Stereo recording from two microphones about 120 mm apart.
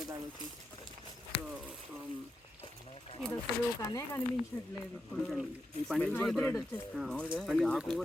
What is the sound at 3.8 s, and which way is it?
Speech, 25° left (ahead or behind).